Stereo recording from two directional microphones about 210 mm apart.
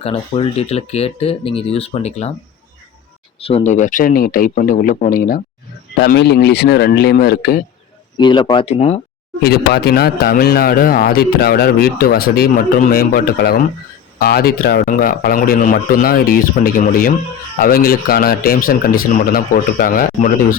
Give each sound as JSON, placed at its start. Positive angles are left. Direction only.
{"t": 0.0, "sound": "speech", "side_deg": 25}
{"t": 3.4, "sound": "a man's voice", "side_deg": 30}
{"t": 6.0, "sound": "speech", "side_deg": 55}
{"t": 8.2, "sound": "speech", "side_deg": 20}
{"t": 9.4, "sound": "a man's voice", "side_deg": 50}